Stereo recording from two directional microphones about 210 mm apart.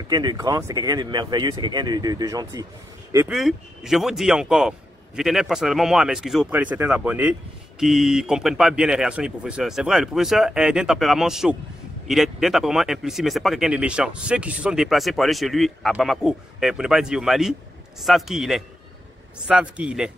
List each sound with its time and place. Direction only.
0.1 s speech: 20° right (ahead or behind)
3.3 s speech: centre (ahead or behind)